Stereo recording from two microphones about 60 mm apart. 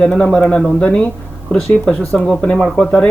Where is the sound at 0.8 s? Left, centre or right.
Left.